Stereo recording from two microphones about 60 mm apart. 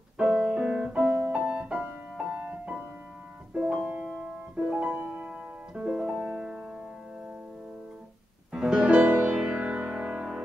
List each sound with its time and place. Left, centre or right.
0.2 s piano: centre
1.4 s music: centre
5.0 s piano: right
8.5 s music: centre